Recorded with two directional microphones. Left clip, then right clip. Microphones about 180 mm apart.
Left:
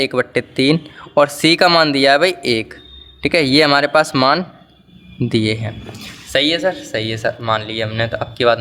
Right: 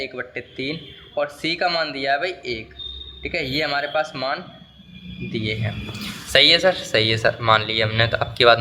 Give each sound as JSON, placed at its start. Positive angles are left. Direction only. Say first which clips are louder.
{"t": 0.0, "sound": "speech", "louder": "left 12 dB", "side_deg": 45}
{"t": 5.6, "sound": "speech", "louder": "even", "side_deg": 30}